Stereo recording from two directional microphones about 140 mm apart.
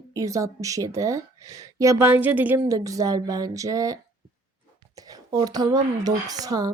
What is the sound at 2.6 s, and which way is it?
Speech, 25° right (ahead or behind).